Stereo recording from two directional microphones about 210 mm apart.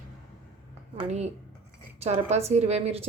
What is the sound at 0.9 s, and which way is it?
A woman's voice, 30° right (ahead or behind).